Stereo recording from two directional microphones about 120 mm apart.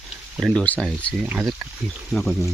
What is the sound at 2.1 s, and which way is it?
Speech, centre (ahead or behind).